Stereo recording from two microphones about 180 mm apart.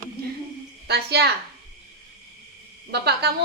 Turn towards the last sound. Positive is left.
turn(degrees=-65)  # may be behind; listen again after turning